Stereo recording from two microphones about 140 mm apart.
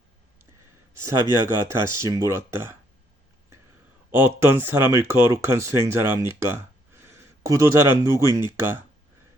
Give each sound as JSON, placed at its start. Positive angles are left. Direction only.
{"t": 1.5, "sound": "speech", "side_deg": -20}
{"t": 4.1, "sound": "speech", "side_deg": -15}